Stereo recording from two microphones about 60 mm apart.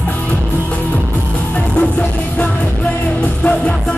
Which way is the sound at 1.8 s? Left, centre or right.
Centre.